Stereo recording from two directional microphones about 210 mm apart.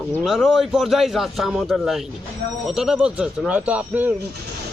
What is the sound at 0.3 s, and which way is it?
Speech, centre (ahead or behind).